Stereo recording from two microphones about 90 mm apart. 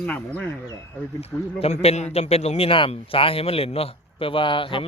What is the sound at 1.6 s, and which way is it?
Speech, 90° left.